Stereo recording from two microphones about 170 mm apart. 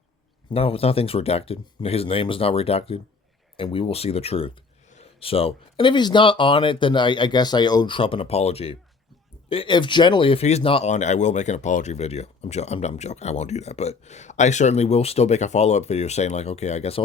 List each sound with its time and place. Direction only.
0.5 s speech: 35° left (ahead or behind)
10.9 s speech: 45° left (ahead or behind)